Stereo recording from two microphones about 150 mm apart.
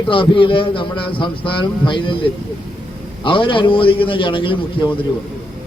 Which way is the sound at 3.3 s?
35° left (ahead or behind).